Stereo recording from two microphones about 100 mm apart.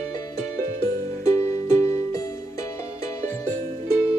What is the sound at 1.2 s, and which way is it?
Music, 30° left (ahead or behind).